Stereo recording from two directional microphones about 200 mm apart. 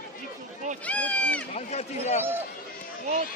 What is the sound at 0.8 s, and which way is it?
Speech, 5° left (ahead or behind).